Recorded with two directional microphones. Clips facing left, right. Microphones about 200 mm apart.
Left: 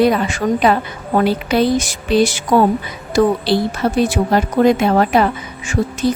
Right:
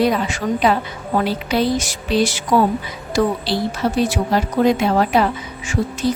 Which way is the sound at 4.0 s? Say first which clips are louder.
Left 4 dB; 55° left (ahead or behind).